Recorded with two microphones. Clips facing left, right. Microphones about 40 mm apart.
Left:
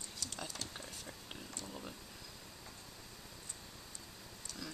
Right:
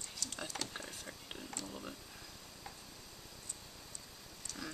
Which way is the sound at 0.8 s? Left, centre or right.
Centre.